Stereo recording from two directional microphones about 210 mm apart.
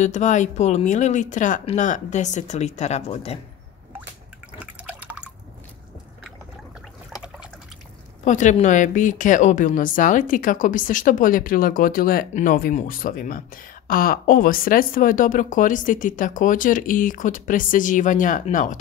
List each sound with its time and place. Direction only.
0.0 s speech: 35° left (ahead or behind)
4.6 s drip: 5° right (ahead or behind)
8.2 s speech: 35° left (ahead or behind)